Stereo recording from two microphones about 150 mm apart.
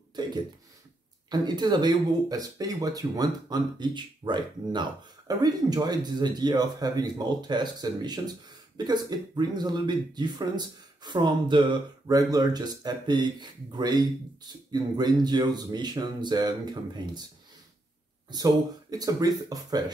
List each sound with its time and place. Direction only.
1.3 s speech: 30° right (ahead or behind)
18.3 s speech: 25° right (ahead or behind)